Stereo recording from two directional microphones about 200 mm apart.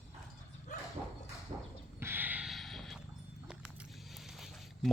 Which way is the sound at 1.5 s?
30° right (ahead or behind).